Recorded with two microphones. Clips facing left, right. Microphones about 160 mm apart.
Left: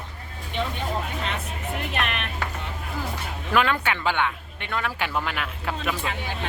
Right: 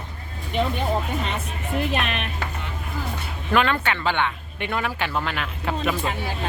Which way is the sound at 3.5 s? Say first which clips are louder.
Right 2 dB; 5° left (ahead or behind).